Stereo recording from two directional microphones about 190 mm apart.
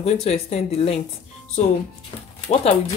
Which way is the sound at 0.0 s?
35° left (ahead or behind).